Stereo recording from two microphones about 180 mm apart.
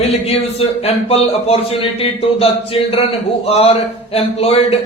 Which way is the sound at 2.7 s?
35° left (ahead or behind).